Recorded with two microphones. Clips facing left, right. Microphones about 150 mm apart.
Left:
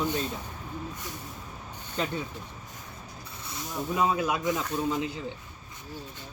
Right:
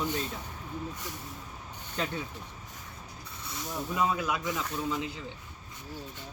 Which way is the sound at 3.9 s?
15° left (ahead or behind).